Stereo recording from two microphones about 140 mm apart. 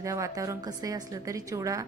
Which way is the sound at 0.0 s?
20° right (ahead or behind).